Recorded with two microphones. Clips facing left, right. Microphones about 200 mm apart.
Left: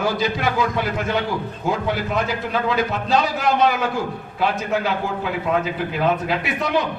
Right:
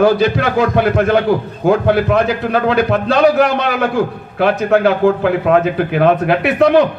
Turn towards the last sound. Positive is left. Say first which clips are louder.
# right 11 dB
turn(degrees=-65)  # may be behind; listen again after turning